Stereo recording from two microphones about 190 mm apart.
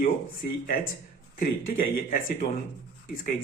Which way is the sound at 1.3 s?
45° left (ahead or behind).